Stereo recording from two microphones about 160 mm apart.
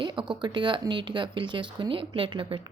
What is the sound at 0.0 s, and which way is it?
Speech, 30° right (ahead or behind).